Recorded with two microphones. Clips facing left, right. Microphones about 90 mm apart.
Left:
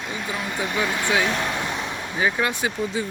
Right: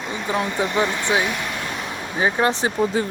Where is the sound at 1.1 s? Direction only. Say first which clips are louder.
Right 1 dB; 20° right (ahead or behind).